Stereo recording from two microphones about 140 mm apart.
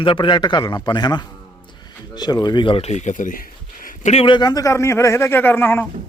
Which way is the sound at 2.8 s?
55° left (ahead or behind).